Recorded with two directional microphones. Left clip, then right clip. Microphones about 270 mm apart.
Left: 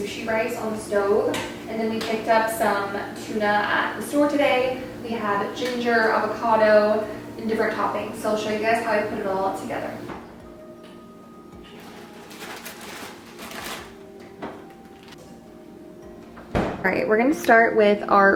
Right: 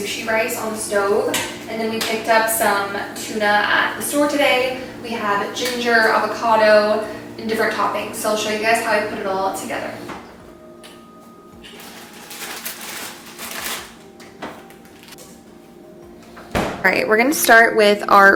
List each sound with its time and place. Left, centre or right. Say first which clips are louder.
0.0 s a woman's voice: right 5 dB; centre
9.3 s a woman's voice: right 3 dB; centre
9.6 s speech: right 3 dB; centre
12.4 s a sound: right 6 dB; centre
16.5 s speech: right 6 dB; centre
18.0 s a woman's voice: right 9 dB; centre